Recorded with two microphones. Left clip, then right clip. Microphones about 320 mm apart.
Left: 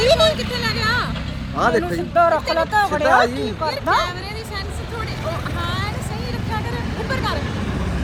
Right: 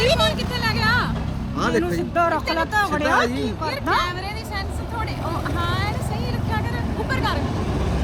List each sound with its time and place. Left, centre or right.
0.0 s a sound: centre
1.5 s speech: centre
5.6 s vehicle: centre
7.1 s vehicle: centre